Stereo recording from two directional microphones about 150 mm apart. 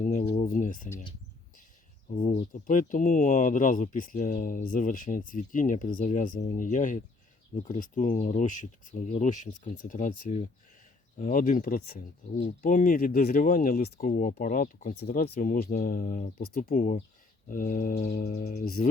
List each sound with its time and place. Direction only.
0.0 s a sound: 55° left (ahead or behind)
2.2 s speech: 50° left (ahead or behind)
2.5 s speech: 60° left (ahead or behind)
18.5 s music: 90° left